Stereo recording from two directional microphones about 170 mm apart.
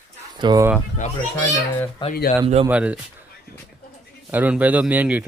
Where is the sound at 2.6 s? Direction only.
10° right (ahead or behind).